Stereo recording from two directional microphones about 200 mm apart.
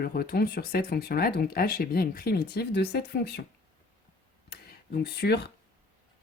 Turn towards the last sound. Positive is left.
turn(degrees=55)  # may be behind; listen again after turning